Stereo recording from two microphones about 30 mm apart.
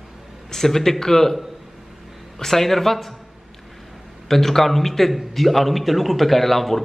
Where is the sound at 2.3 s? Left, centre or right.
Centre.